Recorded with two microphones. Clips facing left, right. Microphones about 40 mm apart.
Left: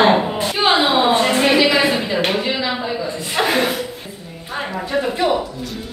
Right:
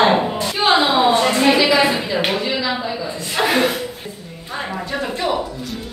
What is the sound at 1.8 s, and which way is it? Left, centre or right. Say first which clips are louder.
Speech: even; centre.